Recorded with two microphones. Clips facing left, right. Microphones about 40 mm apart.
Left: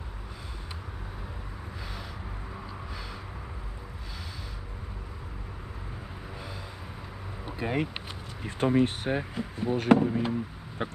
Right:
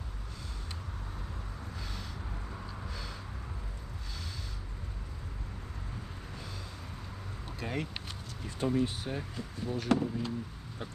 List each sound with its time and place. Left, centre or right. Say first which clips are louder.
7.4 s a sound: left 7 dB; centre
8.4 s speech: left 6 dB; left
10.8 s speech: left 10 dB; left